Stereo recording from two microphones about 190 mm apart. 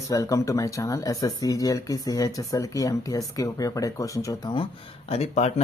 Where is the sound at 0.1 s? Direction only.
15° left (ahead or behind).